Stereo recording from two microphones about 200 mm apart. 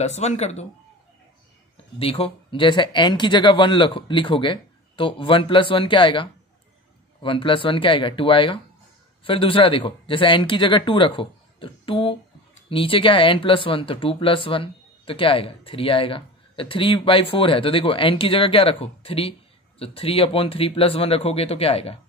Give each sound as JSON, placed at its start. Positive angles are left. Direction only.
{"t": 0.0, "sound": "speech", "side_deg": 35}
{"t": 2.0, "sound": "speech", "side_deg": 30}